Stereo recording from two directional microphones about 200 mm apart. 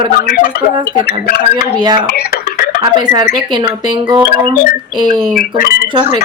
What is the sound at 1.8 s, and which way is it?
Speech, 20° right (ahead or behind).